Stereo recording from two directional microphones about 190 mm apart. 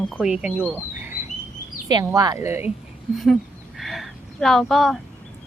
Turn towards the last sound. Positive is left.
turn(degrees=0)  # may be behind; listen again after turning